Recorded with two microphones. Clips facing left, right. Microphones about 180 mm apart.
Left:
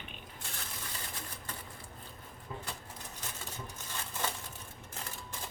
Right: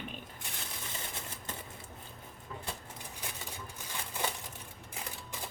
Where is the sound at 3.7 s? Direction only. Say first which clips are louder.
Right 1 dB; 15° right (ahead or behind).